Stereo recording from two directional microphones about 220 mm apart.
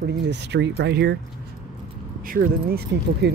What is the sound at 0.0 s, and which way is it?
Speech, 50° right (ahead or behind).